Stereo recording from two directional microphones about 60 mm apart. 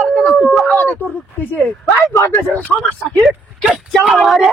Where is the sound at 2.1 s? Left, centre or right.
Left.